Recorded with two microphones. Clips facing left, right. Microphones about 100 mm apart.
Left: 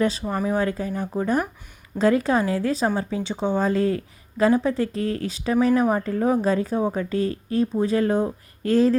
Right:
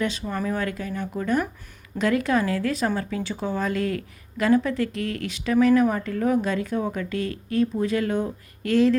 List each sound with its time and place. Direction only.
0.0 s a woman's voice: 35° left (ahead or behind)